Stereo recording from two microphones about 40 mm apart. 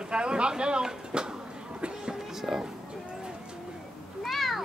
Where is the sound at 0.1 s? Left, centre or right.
Right.